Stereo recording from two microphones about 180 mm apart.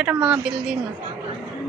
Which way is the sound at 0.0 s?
5° right (ahead or behind).